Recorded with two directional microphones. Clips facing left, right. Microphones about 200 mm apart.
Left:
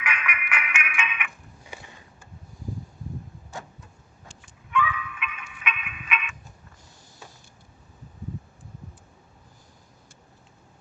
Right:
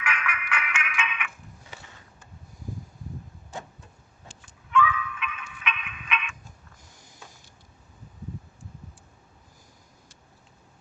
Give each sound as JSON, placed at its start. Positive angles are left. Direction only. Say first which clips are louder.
{"t": 0.0, "sound": "music", "louder": "even", "side_deg": 15}
{"t": 1.7, "sound": "a sound", "louder": "left 5 dB", "side_deg": 15}
{"t": 4.7, "sound": "music", "louder": "right 3 dB", "side_deg": 15}